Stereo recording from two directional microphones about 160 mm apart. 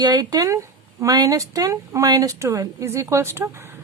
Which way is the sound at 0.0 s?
25° right (ahead or behind).